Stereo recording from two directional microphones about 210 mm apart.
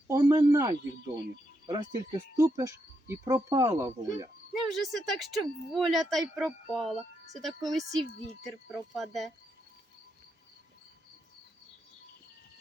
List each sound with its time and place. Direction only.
0.1 s speech: 15° right (ahead or behind)
4.7 s speech: centre (ahead or behind)